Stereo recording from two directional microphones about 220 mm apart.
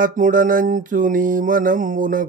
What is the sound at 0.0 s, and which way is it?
Mantra, 35° right (ahead or behind).